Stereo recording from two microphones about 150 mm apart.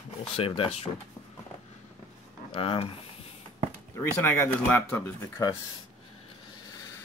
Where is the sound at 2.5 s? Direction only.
40° left (ahead or behind).